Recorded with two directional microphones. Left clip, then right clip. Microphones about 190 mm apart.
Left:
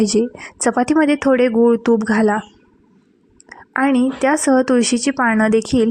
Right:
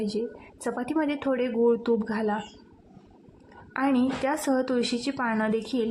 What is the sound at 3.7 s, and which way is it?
A woman's voice, 35° left (ahead or behind).